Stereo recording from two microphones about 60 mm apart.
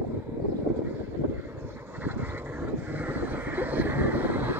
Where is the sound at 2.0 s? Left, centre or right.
Right.